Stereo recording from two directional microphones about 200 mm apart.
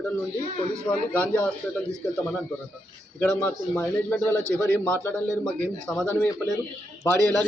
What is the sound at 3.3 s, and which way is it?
A man's voice, 10° left (ahead or behind).